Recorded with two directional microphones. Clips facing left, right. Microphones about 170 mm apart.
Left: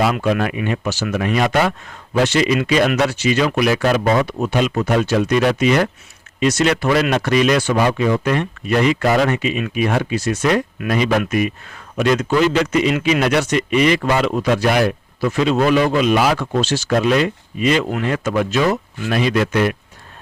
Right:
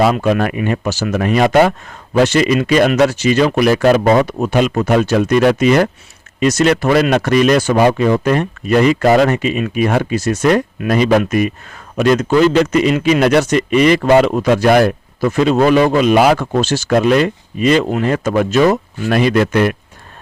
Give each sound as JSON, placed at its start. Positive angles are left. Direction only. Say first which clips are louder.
{"t": 0.0, "sound": "a man's voice", "louder": "right 4 dB", "side_deg": -50}